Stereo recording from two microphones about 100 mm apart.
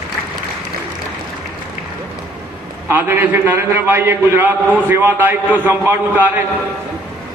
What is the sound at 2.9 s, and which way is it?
A man's voice, 25° right (ahead or behind).